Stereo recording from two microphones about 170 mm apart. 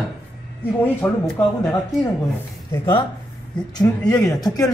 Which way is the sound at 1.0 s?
10° left (ahead or behind).